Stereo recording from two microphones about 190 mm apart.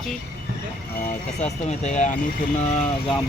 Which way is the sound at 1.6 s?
35° left (ahead or behind).